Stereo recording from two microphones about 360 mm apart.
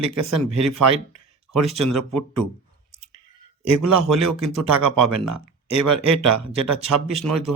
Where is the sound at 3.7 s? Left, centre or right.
Right.